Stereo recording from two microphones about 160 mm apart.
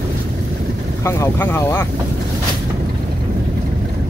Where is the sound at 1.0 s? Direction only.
15° left (ahead or behind).